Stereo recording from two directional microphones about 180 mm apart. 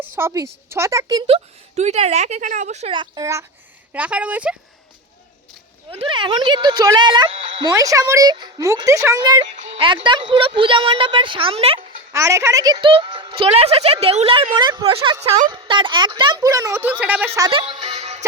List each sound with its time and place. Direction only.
0.0 s a woman's voice: 15° right (ahead or behind)
1.7 s a woman's voice: 40° right (ahead or behind)
3.0 s a woman's voice: 20° right (ahead or behind)
3.9 s a woman's voice: 5° right (ahead or behind)
5.9 s a woman's voice: 30° right (ahead or behind)
12.1 s a woman's voice: 15° right (ahead or behind)
17.5 s music: 30° right (ahead or behind)